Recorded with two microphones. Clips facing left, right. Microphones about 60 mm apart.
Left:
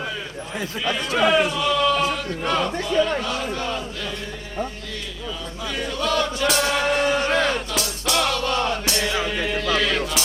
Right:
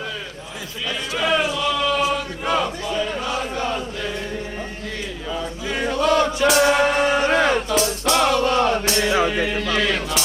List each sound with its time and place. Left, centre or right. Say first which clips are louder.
1.2 s speech: left 1 dB; centre
3.2 s chant: right 1 dB; centre
5.7 s choir: right 5 dB; right
6.5 s music: right 5 dB; centre
9.5 s speech: right 1 dB; centre